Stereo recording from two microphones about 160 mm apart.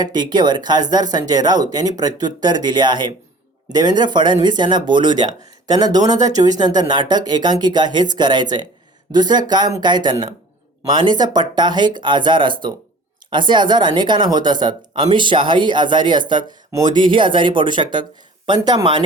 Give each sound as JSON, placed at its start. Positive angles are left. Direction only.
{"t": 0.0, "sound": "speech", "side_deg": -25}